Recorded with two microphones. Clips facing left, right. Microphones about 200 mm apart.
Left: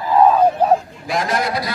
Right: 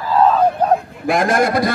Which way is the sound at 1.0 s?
50° right (ahead or behind).